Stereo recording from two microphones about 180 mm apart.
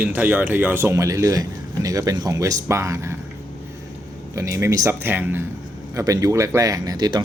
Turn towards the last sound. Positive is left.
turn(degrees=-20)  # may be behind; listen again after turning